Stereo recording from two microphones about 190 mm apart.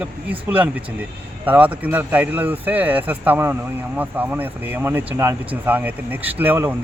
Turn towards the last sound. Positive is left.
turn(degrees=-10)  # may be behind; listen again after turning